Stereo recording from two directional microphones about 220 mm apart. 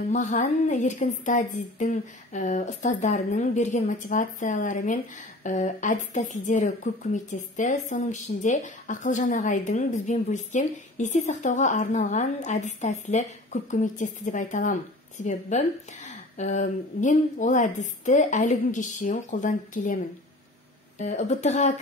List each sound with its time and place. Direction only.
0.1 s a woman's voice: 35° left (ahead or behind)
21.0 s a woman's voice: 30° left (ahead or behind)